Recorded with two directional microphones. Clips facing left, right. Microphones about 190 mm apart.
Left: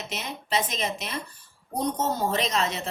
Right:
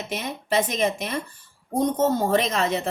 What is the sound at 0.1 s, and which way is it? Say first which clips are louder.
A woman's voice: right 4 dB; 55° right (ahead or behind).